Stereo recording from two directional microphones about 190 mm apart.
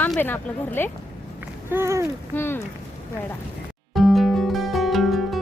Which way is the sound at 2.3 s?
10° left (ahead or behind).